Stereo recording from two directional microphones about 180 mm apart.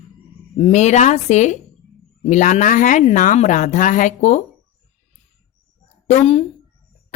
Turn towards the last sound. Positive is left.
turn(degrees=35)  # may be behind; listen again after turning